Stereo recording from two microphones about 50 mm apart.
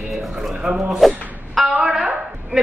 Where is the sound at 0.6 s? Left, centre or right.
Centre.